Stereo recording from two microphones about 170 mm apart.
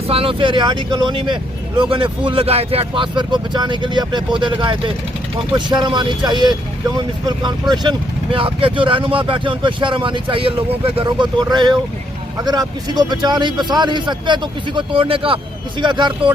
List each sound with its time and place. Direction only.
0.1 s speech: 35° right (ahead or behind)